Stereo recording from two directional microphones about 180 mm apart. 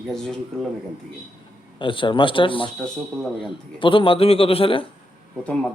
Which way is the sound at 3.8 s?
30° left (ahead or behind).